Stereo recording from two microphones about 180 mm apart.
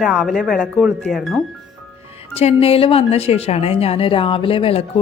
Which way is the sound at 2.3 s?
35° left (ahead or behind).